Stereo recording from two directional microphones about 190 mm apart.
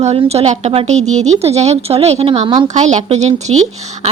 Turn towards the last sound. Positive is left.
turn(degrees=-35)  # may be behind; listen again after turning